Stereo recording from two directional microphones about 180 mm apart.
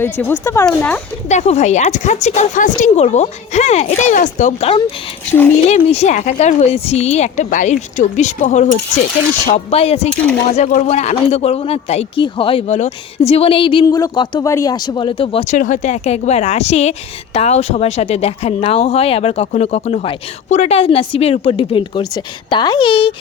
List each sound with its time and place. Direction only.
0.0 s speech: 10° left (ahead or behind)
1.3 s speech: 40° left (ahead or behind)
13.8 s speech: 20° left (ahead or behind)
15.5 s speech: 45° left (ahead or behind); by 23.1 s 25° left (ahead or behind)